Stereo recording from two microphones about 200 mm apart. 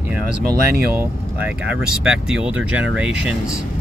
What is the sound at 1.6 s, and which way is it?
Speech, 5° right (ahead or behind).